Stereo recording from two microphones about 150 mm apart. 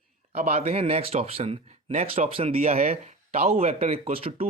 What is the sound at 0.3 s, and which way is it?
Speech, 45° right (ahead or behind).